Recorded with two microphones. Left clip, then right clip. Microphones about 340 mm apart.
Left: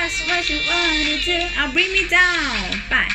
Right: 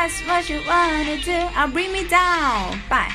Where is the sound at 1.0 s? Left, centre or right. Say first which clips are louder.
Left 3 dB; centre.